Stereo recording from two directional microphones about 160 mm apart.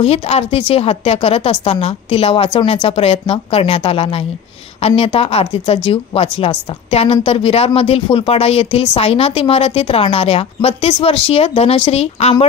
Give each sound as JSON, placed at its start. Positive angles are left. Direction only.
{"t": 0.0, "sound": "speech", "side_deg": 40}